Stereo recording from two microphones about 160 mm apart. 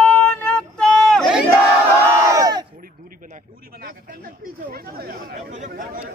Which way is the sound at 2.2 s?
20° right (ahead or behind).